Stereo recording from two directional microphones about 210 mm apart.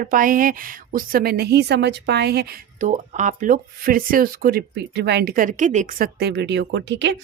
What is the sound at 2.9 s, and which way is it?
Speech, 35° right (ahead or behind).